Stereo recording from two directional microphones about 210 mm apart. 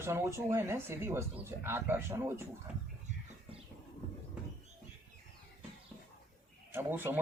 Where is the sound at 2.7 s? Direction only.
5° right (ahead or behind).